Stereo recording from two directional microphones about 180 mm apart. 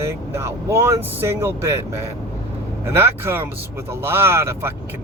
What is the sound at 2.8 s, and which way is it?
Speech, 15° right (ahead or behind).